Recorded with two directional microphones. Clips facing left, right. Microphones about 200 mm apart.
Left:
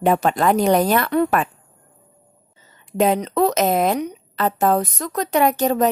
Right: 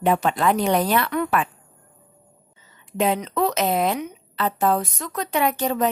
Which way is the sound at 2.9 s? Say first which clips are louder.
Left 4 dB; 40° left (ahead or behind).